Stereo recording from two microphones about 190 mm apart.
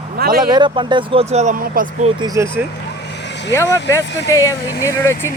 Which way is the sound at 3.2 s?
65° left (ahead or behind).